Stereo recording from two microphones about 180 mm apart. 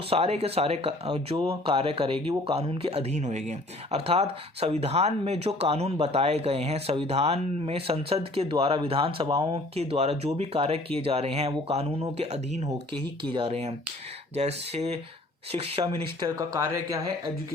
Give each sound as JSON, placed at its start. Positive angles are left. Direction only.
{"t": 0.1, "sound": "speech", "side_deg": -35}
{"t": 9.2, "sound": "speech", "side_deg": -20}
{"t": 9.7, "sound": "speech", "side_deg": -35}
{"t": 16.2, "sound": "speech", "side_deg": -20}